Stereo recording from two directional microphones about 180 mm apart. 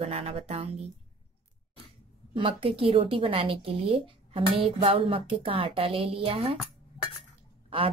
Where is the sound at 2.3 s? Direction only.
30° right (ahead or behind).